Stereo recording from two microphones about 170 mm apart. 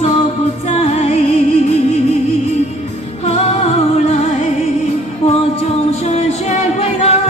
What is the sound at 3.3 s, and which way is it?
Music, 40° left (ahead or behind).